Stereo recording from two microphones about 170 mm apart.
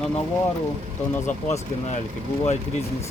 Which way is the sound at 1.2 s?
45° left (ahead or behind).